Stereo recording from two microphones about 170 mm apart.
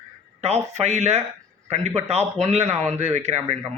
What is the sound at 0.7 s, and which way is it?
Speech, 40° right (ahead or behind).